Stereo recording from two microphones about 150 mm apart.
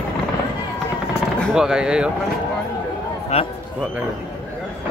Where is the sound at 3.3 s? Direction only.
45° left (ahead or behind).